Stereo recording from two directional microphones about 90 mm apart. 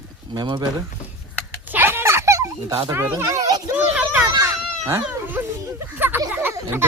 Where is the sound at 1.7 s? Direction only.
25° right (ahead or behind).